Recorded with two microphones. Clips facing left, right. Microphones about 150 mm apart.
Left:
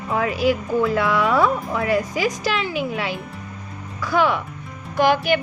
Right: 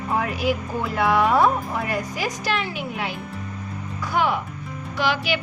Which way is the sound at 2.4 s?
90° left.